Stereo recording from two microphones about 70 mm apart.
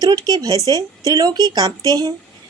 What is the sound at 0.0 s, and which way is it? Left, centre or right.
A woman's voice, right.